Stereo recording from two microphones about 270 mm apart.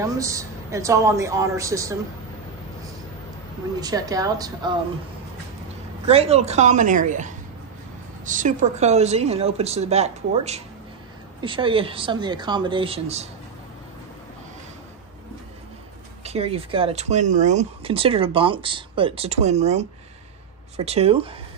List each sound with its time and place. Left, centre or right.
0.0 s speech: centre
3.8 s speech: centre
6.0 s speech: right
16.3 s speech: right